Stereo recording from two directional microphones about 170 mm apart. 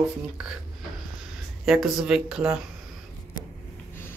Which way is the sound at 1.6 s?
5° right (ahead or behind).